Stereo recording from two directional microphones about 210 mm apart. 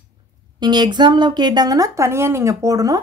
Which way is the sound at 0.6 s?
20° right (ahead or behind).